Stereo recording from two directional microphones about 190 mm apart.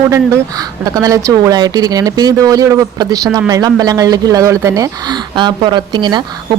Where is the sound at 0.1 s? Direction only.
15° right (ahead or behind).